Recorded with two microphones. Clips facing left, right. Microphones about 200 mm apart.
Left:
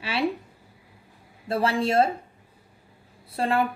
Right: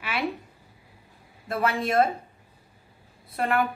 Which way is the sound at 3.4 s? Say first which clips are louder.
Left 1 dB; 30° left (ahead or behind).